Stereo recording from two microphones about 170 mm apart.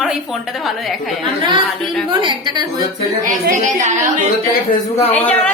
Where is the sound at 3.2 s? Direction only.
50° right (ahead or behind).